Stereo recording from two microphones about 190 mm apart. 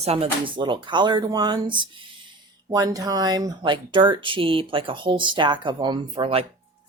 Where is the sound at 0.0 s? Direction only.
30° right (ahead or behind).